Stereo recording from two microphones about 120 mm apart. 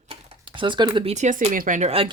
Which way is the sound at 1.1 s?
80° right.